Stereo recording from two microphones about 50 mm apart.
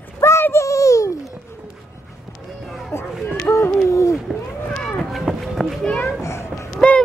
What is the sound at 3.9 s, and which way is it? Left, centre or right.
Run, left.